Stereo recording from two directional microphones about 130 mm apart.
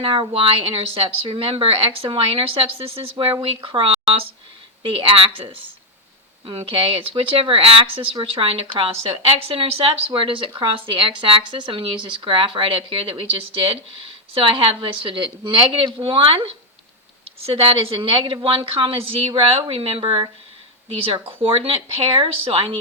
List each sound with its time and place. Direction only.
0.0 s a woman's voice: 40° right (ahead or behind)
6.4 s a woman's voice: 40° right (ahead or behind)
17.4 s a woman's voice: 45° right (ahead or behind)